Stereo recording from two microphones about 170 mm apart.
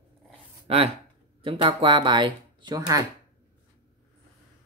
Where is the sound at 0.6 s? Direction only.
35° right (ahead or behind).